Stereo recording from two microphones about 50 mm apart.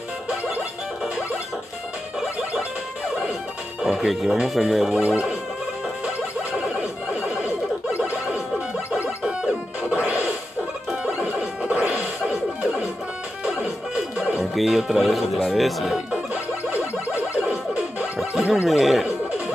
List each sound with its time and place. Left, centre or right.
3.8 s music: centre
4.1 s speech: centre
4.9 s speech: right
9.2 s music: right
14.1 s music: centre
14.4 s speech: centre
17.1 s music: right
18.7 s speech: centre